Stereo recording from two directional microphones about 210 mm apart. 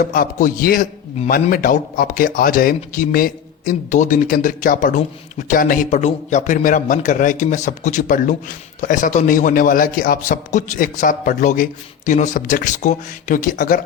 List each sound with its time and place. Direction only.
0.0 s a man's voice: 40° left (ahead or behind)